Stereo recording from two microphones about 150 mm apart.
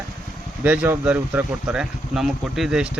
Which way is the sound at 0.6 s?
10° right (ahead or behind).